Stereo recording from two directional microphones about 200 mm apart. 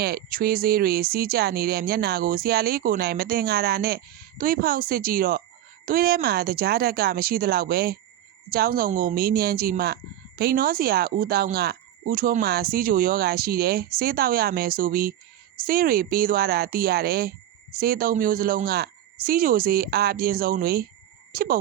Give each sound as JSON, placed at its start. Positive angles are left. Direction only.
{"t": 0.0, "sound": "speech", "side_deg": -50}